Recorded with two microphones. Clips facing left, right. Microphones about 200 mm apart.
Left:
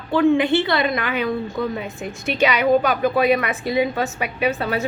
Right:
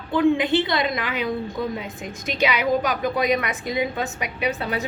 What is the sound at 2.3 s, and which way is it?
A woman's voice, 15° right (ahead or behind).